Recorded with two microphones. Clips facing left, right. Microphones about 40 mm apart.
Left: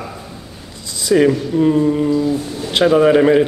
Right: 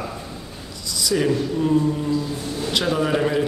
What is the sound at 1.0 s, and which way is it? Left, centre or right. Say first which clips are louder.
A man's voice: left 7 dB; left.